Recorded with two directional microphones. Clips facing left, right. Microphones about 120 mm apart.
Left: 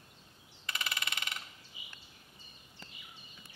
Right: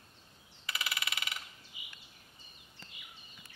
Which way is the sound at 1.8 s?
35° left (ahead or behind).